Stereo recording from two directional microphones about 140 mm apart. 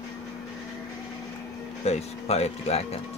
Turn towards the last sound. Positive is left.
turn(degrees=50)  # may be behind; listen again after turning